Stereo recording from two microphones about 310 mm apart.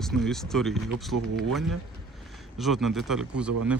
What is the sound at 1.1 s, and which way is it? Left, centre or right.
Speech, right.